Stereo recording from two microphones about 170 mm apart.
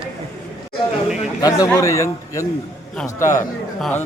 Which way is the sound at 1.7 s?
20° left (ahead or behind).